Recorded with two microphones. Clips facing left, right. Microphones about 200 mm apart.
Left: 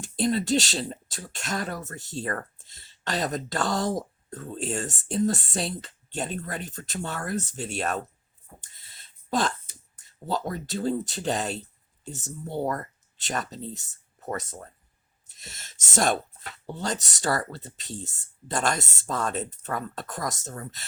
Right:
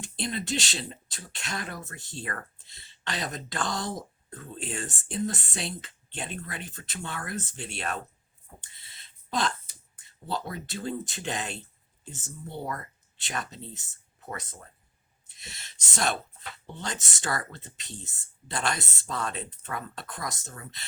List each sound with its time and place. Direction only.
0.0 s speech: 40° left (ahead or behind)
8.6 s a sound: 45° left (ahead or behind)
9.9 s speech: 45° left (ahead or behind)